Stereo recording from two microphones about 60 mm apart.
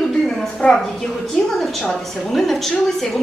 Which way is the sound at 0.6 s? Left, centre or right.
Centre.